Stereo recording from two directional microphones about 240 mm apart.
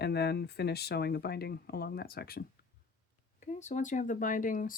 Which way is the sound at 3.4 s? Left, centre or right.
Left.